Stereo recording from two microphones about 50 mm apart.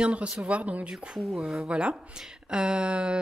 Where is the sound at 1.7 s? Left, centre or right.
Right.